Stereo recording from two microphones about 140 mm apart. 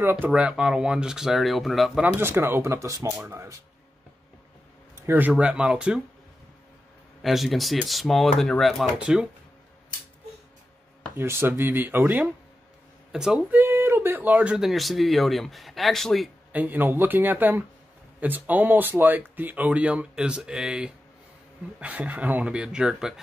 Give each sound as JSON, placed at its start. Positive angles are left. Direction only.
{"t": 0.0, "sound": "speech", "side_deg": -10}
{"t": 2.1, "sound": "speech", "side_deg": -15}
{"t": 5.0, "sound": "speech", "side_deg": -15}
{"t": 7.2, "sound": "speech", "side_deg": 0}
{"t": 11.1, "sound": "speech", "side_deg": -15}
{"t": 16.5, "sound": "speech", "side_deg": -15}